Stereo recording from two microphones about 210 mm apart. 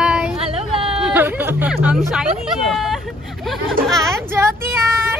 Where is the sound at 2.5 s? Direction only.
Centre (ahead or behind).